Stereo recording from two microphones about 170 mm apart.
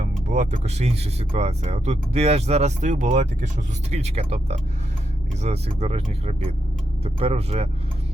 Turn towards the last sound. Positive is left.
turn(degrees=-40)  # may be behind; listen again after turning